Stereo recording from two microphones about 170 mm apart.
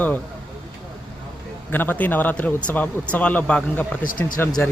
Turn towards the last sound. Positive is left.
turn(degrees=10)  # may be behind; listen again after turning